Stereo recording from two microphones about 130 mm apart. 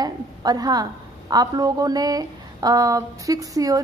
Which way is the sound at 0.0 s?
30° right (ahead or behind).